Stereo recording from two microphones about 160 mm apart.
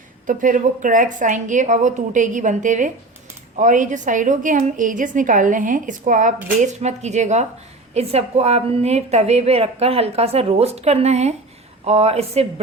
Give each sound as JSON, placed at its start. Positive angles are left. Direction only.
{"t": 0.3, "sound": "a woman's voice", "side_deg": -55}